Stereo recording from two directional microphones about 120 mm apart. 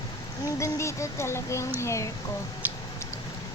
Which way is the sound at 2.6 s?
15° right (ahead or behind).